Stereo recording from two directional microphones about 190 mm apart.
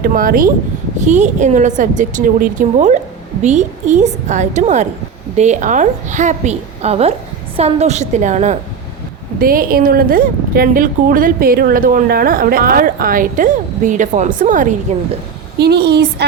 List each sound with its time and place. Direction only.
0.0 s a woman's voice: 50° right (ahead or behind)
9.4 s a woman's voice: 50° right (ahead or behind)
15.5 s speech: 60° right (ahead or behind)